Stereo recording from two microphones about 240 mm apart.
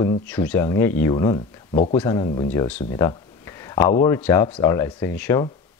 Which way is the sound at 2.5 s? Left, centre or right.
Centre.